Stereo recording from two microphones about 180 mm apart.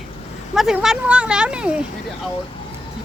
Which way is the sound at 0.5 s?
Centre (ahead or behind).